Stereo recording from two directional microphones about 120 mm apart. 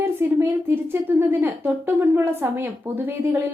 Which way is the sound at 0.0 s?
20° right (ahead or behind).